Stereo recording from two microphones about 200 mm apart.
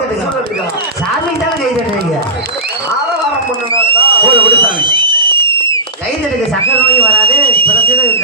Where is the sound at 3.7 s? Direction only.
25° right (ahead or behind).